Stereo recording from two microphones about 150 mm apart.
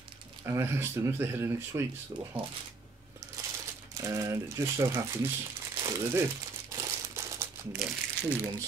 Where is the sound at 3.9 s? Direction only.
20° right (ahead or behind).